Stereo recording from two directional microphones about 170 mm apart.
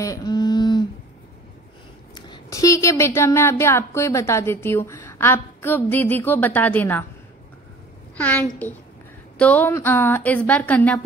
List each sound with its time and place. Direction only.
0.0 s a sound: 20° left (ahead or behind)
2.1 s speech: 25° left (ahead or behind)
8.2 s a woman's voice: 10° left (ahead or behind)